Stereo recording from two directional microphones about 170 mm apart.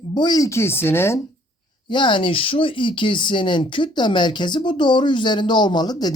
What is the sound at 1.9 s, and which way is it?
Speech, 30° left (ahead or behind).